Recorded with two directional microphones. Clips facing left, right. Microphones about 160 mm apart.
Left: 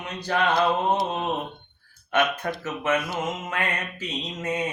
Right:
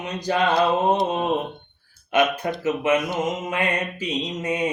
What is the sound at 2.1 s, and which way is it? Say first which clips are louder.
Mantra: right 3 dB; 10° right (ahead or behind).